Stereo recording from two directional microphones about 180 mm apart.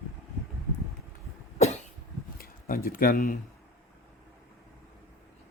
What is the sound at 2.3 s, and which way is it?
Speech, 55° left (ahead or behind).